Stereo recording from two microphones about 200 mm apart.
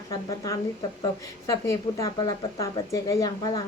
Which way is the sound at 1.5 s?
15° left (ahead or behind).